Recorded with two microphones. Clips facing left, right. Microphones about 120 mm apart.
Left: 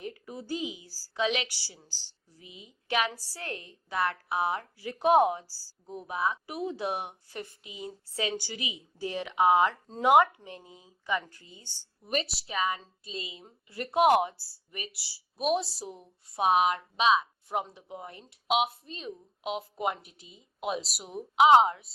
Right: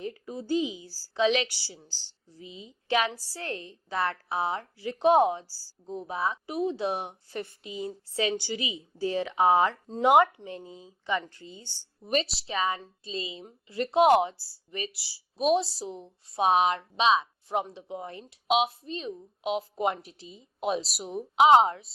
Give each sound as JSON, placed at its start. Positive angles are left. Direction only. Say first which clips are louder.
{"t": 0.0, "sound": "speech", "louder": "right 4 dB", "side_deg": -30}